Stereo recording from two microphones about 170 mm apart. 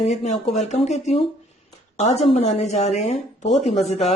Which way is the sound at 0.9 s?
40° left (ahead or behind).